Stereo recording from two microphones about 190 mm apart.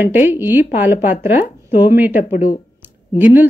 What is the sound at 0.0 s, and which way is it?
Speech, 10° right (ahead or behind).